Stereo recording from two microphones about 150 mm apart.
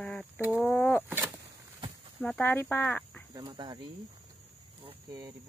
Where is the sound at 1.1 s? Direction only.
15° right (ahead or behind).